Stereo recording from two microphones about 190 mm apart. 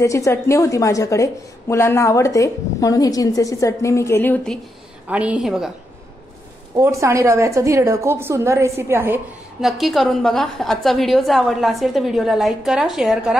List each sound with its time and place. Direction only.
0.0 s a woman's voice: 15° left (ahead or behind)
5.0 s a woman's voice: 5° right (ahead or behind)
6.7 s a woman's voice: 15° right (ahead or behind)
9.6 s a woman's voice: centre (ahead or behind)